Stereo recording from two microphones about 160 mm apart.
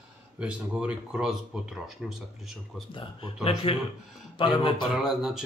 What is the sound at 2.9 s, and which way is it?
Speech, 30° left (ahead or behind).